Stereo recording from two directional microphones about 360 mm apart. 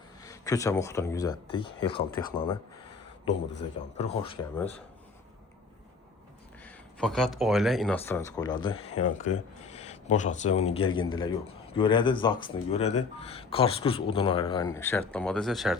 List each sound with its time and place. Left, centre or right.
0.2 s speech: centre
3.9 s speech: centre
6.7 s speech: centre